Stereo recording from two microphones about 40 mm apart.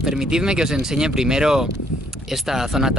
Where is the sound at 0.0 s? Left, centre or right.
Centre.